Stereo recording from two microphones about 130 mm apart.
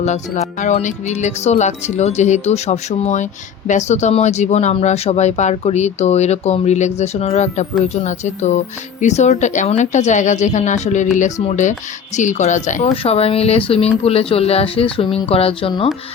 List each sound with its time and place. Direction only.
0.6 s speech: 65° left (ahead or behind)
12.9 s speech: 50° left (ahead or behind)